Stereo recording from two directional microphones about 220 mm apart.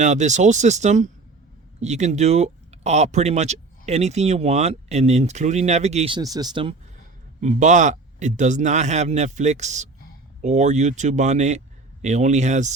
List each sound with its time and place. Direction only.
0.0 s speech: 30° right (ahead or behind)
7.4 s speech: 35° right (ahead or behind)